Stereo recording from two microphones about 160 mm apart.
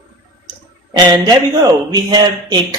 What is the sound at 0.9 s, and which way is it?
Speech, 25° right (ahead or behind).